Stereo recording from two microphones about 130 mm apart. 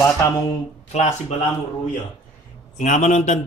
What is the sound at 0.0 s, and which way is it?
Speech, 25° left (ahead or behind).